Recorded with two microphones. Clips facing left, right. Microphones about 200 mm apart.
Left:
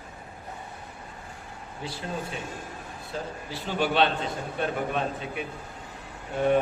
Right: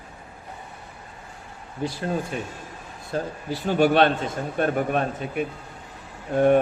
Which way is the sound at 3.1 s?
50° right (ahead or behind).